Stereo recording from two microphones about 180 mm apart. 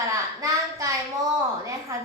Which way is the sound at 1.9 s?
20° right (ahead or behind).